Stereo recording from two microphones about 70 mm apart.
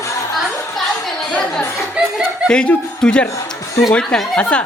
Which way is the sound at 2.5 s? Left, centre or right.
Centre.